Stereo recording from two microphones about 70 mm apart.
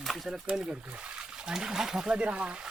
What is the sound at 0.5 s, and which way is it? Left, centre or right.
Speech, centre.